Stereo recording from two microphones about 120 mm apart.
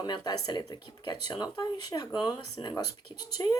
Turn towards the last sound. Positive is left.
turn(degrees=35)  # may be behind; listen again after turning